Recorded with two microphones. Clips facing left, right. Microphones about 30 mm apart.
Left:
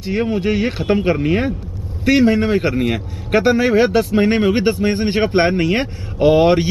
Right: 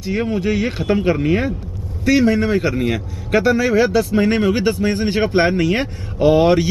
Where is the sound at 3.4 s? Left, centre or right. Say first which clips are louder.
Left 2 dB; left.